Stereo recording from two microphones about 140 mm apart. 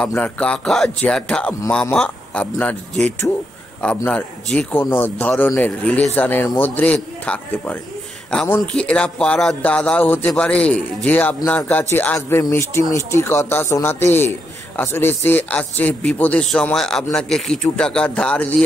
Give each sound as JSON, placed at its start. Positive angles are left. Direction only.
{"t": 0.0, "sound": "a man's voice", "side_deg": 10}